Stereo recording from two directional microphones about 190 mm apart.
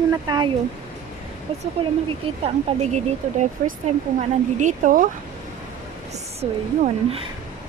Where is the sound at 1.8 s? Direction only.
30° right (ahead or behind).